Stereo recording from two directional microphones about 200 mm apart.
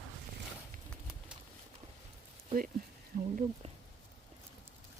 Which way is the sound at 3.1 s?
40° right (ahead or behind).